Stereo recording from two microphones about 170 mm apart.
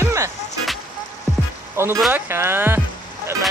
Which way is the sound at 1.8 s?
15° right (ahead or behind).